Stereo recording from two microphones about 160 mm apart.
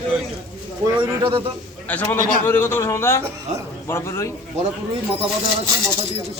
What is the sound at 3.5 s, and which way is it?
Speech, 45° right (ahead or behind).